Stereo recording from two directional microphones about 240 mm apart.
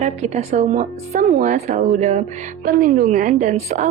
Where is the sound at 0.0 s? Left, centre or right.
Right.